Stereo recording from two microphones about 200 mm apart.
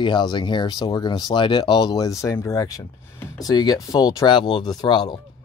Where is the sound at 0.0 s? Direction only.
20° left (ahead or behind).